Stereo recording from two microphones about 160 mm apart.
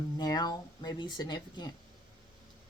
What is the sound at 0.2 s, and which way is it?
Speech, 25° left (ahead or behind).